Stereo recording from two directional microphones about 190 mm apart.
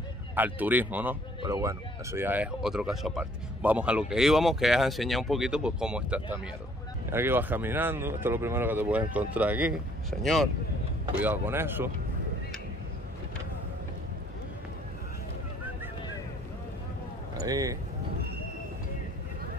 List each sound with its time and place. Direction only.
0.4 s speech: 10° right (ahead or behind)
11.1 s speech: 10° right (ahead or behind)
17.4 s speech: 20° right (ahead or behind)